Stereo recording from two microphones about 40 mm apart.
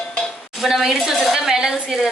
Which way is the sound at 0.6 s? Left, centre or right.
Centre.